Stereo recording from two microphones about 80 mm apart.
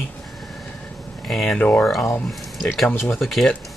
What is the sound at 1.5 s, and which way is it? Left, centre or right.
Speech, centre.